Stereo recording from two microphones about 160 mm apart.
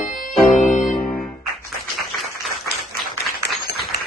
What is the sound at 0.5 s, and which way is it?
Music, 50° left (ahead or behind).